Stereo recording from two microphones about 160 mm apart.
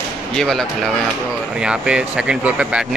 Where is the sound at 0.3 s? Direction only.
5° left (ahead or behind).